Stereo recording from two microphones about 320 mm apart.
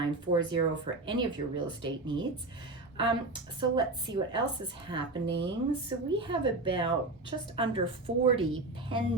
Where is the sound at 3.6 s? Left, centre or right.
Centre.